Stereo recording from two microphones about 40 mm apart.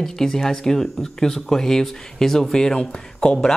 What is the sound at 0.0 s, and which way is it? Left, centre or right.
Speech, centre.